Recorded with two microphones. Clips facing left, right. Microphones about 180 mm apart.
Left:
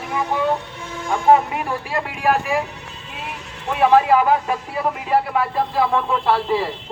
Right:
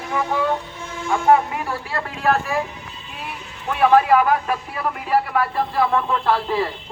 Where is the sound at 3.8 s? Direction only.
25° left (ahead or behind).